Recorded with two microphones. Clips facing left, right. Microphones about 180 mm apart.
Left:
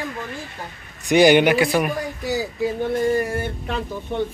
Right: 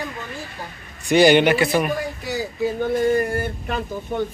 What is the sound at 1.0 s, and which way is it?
Speech, 15° left (ahead or behind).